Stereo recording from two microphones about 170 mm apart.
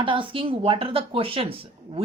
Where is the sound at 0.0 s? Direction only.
30° right (ahead or behind).